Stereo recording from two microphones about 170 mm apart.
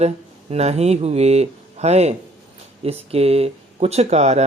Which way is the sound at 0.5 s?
40° right (ahead or behind).